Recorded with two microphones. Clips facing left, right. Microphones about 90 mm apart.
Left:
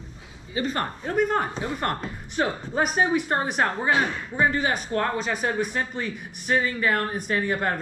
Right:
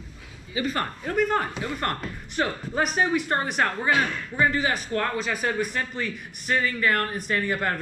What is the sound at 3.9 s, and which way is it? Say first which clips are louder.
Speech: left 1 dB; 20° left (ahead or behind).